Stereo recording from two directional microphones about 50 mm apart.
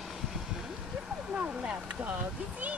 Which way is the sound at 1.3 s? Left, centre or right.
Right.